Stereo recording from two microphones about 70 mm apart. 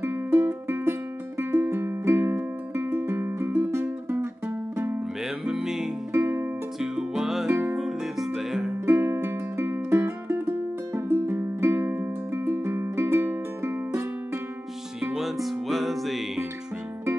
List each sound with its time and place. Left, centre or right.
0.0 s music: right
5.5 s music: centre
8.8 s music: right
15.1 s music: centre